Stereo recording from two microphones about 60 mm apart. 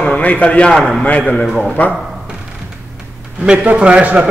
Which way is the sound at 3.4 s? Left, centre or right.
Centre.